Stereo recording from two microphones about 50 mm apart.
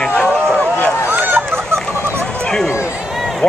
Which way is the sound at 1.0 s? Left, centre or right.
Right.